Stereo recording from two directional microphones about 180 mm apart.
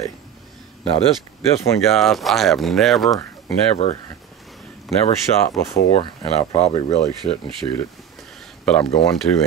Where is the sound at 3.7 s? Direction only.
35° left (ahead or behind).